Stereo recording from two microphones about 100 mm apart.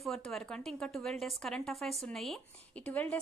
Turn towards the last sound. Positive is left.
turn(degrees=15)  # may be behind; listen again after turning